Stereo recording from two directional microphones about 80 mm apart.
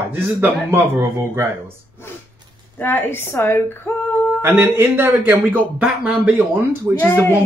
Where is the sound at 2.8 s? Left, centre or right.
Left.